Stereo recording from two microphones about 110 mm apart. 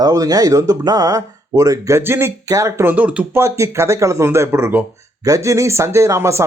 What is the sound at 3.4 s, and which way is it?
Speech, 25° right (ahead or behind).